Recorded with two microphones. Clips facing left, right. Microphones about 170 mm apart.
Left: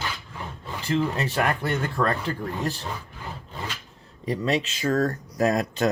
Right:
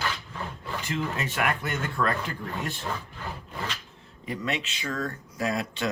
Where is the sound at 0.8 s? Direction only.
35° left (ahead or behind).